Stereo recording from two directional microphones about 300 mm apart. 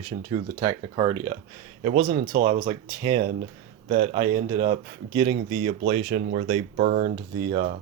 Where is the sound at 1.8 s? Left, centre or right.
Right.